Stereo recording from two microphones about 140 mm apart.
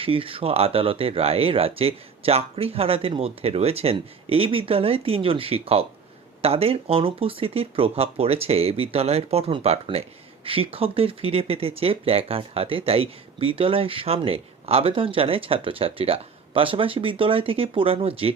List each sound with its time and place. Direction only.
0.0 s speech: 40° right (ahead or behind)